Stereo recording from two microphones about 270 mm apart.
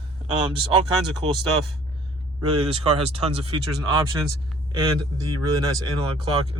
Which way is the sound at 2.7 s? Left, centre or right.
Right.